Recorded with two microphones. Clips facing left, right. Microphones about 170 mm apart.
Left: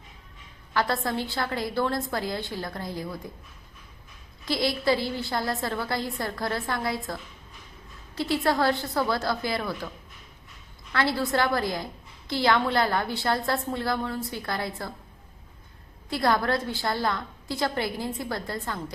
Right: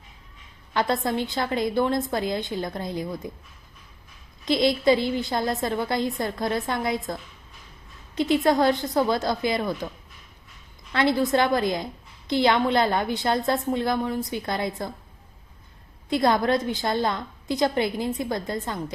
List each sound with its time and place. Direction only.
0.7 s a woman's voice: 20° right (ahead or behind)
4.4 s a woman's voice: 20° right (ahead or behind)
10.9 s a woman's voice: 20° right (ahead or behind)
16.0 s a woman's voice: 20° right (ahead or behind)